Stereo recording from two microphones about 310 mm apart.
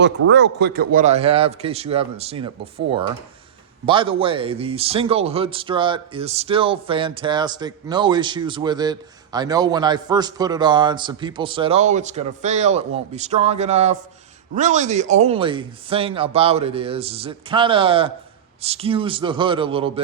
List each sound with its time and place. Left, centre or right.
0.0 s speech: right; by 2.5 s centre
3.8 s speech: centre